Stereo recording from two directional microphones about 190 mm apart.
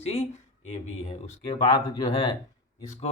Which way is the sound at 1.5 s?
20° left (ahead or behind).